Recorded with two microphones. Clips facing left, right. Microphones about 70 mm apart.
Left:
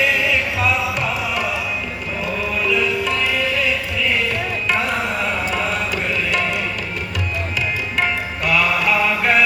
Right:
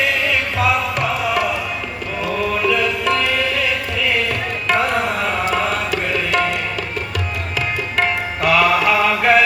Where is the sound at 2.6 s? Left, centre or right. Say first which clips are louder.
Even; right.